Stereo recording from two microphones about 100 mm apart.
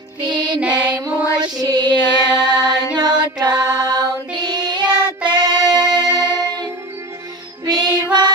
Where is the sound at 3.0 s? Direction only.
45° right (ahead or behind).